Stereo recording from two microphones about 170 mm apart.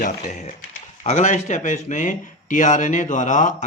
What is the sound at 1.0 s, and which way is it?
Speech, 45° left (ahead or behind).